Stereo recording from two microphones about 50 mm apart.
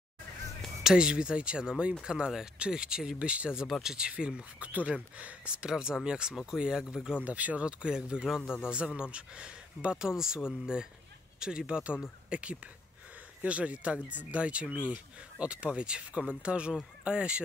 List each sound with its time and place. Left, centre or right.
0.8 s speech: centre
4.6 s speech: right
5.6 s speech: centre
7.2 s speech: right